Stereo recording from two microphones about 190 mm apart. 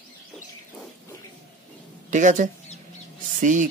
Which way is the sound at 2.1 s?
40° right (ahead or behind).